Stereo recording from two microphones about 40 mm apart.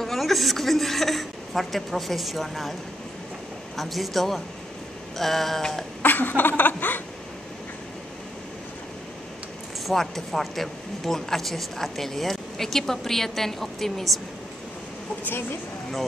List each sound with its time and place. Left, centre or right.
0.0 s a woman's voice: centre
3.7 s a sound: centre
6.0 s chuckle: left
9.9 s speech: centre